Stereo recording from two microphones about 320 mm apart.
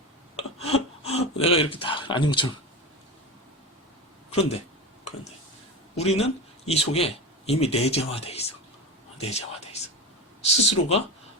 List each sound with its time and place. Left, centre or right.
0.3 s a sound: centre
1.4 s speech: centre
6.0 s a man's voice: centre
10.4 s speech: centre